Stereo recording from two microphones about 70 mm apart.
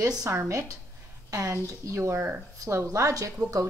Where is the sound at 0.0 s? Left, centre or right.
Right.